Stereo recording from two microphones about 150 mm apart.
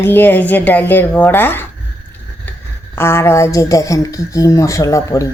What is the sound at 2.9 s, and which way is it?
A woman's voice, 15° left (ahead or behind).